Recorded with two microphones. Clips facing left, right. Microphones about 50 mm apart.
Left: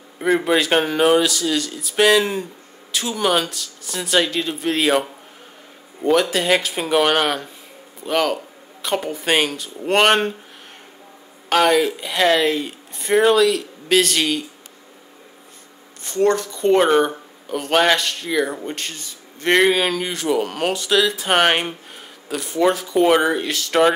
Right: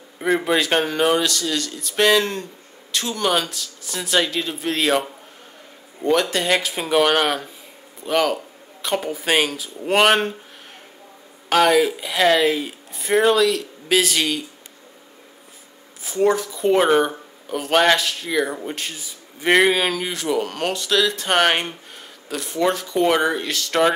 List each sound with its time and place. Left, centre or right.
0.2 s speech: centre
11.4 s speech: centre
16.0 s speech: centre